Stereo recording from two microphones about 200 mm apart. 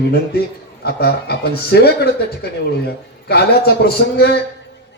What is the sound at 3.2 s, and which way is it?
A man's voice, 55° left (ahead or behind).